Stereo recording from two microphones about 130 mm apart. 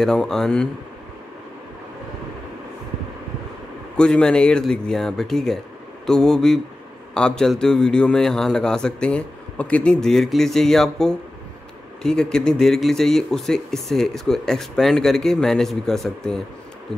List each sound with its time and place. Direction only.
0.0 s speech: 5° left (ahead or behind)
3.9 s speech: 5° left (ahead or behind)